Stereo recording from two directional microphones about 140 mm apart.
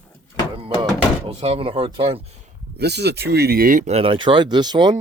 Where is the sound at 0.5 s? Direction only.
35° right (ahead or behind).